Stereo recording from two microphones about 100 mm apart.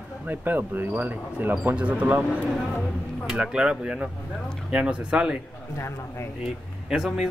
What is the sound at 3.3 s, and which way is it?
Speech, 10° right (ahead or behind).